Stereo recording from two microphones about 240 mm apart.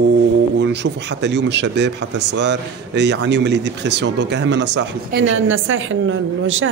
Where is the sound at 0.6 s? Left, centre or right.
Right.